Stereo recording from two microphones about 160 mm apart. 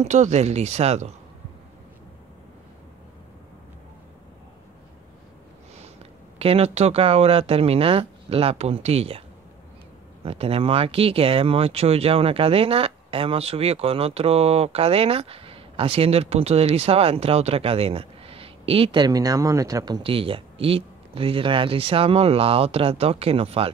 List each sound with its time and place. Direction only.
0.0 s speech: 45° right (ahead or behind)
6.3 s speech: 35° right (ahead or behind)
10.2 s speech: 35° right (ahead or behind)